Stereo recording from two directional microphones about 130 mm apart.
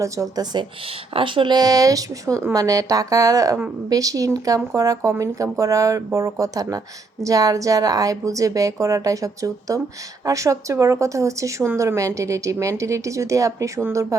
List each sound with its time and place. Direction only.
0.0 s a woman's voice: 25° right (ahead or behind)
1.1 s a woman's voice: 40° right (ahead or behind); by 14.2 s 25° right (ahead or behind)